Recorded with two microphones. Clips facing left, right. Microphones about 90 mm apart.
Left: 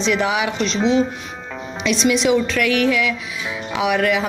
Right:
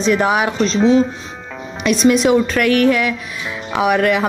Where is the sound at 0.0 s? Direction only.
45° right (ahead or behind).